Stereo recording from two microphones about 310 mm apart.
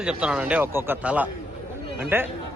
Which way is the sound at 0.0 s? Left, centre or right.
Centre.